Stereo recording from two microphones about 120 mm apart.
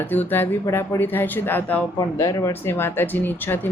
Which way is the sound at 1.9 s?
25° left (ahead or behind).